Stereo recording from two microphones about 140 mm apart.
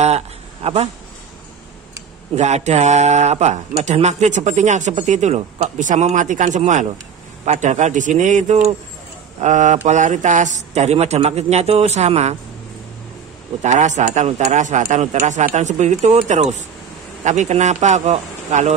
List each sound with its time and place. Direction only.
0.0 s a sound: 45° right (ahead or behind)
2.3 s a man's voice: 55° right (ahead or behind)
13.6 s a man's voice: 60° right (ahead or behind)